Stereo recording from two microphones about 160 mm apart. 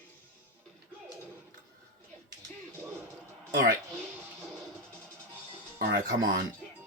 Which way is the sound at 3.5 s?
60° right (ahead or behind).